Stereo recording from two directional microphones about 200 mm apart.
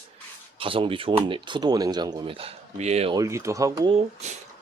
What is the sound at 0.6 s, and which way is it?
Speech, 25° right (ahead or behind).